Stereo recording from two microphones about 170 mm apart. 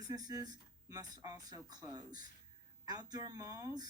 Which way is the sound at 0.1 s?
20° right (ahead or behind).